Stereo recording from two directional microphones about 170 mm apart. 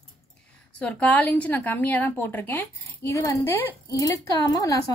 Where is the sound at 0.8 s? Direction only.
10° left (ahead or behind).